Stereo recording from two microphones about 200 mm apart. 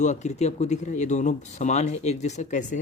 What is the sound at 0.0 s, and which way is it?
Speech, 35° left (ahead or behind).